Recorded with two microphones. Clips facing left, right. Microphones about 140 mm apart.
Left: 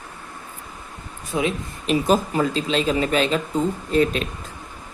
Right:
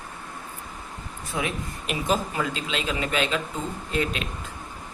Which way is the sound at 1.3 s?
20° left (ahead or behind).